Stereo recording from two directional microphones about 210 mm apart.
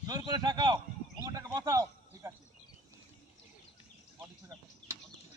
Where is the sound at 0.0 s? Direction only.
20° right (ahead or behind).